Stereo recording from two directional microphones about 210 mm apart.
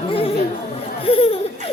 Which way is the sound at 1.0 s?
25° left (ahead or behind).